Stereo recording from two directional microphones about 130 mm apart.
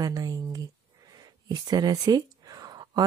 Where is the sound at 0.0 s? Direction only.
30° right (ahead or behind).